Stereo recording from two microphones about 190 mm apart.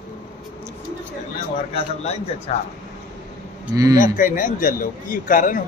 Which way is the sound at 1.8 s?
30° left (ahead or behind).